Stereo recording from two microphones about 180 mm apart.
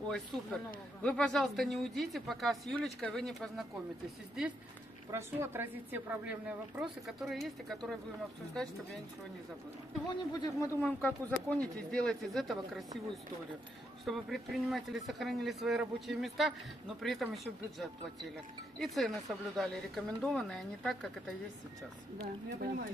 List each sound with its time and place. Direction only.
0.1 s speech: centre (ahead or behind)
5.1 s a woman's voice: 15° right (ahead or behind)
10.0 s speech: 20° left (ahead or behind)
10.8 s speech: 10° left (ahead or behind)
14.0 s speech: centre (ahead or behind)
22.6 s speech: 55° right (ahead or behind)